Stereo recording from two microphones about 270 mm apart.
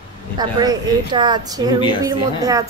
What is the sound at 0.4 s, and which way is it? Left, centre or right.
A woman's voice, centre.